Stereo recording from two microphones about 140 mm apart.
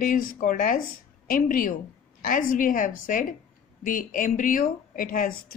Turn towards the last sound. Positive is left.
turn(degrees=80)